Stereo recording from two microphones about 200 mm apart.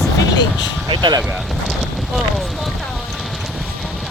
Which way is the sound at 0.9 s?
25° right (ahead or behind).